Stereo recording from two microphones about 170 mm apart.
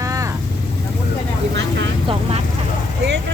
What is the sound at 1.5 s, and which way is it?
Speech, 90° right.